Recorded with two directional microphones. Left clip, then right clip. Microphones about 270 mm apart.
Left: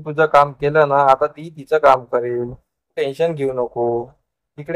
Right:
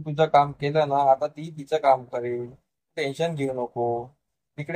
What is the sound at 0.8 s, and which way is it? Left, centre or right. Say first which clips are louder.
Speech: left 5 dB; left.